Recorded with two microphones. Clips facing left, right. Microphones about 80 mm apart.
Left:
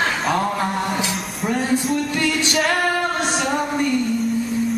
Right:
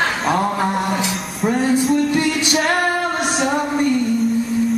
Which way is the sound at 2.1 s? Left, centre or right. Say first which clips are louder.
Right 3 dB; centre.